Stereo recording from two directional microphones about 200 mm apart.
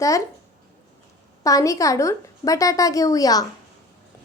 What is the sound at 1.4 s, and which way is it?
A woman's voice, 15° left (ahead or behind).